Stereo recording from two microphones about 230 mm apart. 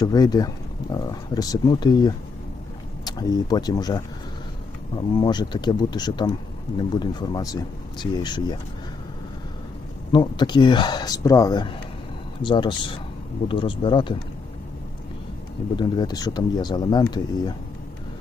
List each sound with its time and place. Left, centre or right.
0.0 s speech: centre
5.1 s speech: centre
10.1 s speech: centre
15.7 s speech: centre